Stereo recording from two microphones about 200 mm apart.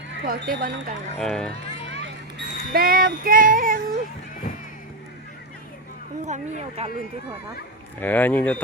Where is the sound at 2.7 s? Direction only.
45° right (ahead or behind).